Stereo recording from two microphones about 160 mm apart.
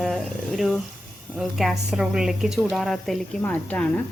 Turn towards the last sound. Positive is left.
turn(degrees=10)  # may be behind; listen again after turning